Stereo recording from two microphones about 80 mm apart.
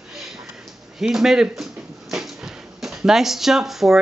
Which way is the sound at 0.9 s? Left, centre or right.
Centre.